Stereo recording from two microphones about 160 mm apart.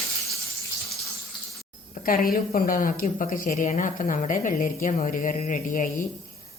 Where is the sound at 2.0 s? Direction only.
60° left (ahead or behind).